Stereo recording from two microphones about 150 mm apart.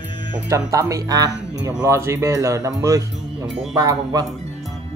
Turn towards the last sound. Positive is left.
turn(degrees=-25)  # may be behind; listen again after turning